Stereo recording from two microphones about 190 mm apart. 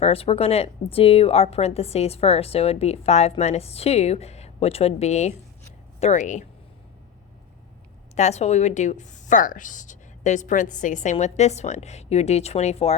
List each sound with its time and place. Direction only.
0.0 s a woman's voice: 30° left (ahead or behind)
8.1 s a woman's voice: 35° left (ahead or behind)